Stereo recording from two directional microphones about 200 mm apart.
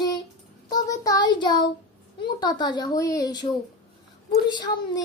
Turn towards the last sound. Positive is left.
turn(degrees=20)  # may be behind; listen again after turning